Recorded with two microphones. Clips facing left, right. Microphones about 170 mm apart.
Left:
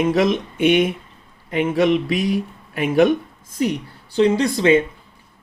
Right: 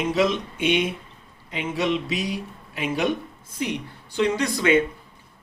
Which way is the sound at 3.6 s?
35° left (ahead or behind).